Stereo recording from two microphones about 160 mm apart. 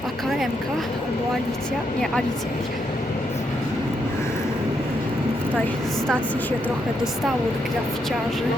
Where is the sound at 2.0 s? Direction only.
5° left (ahead or behind).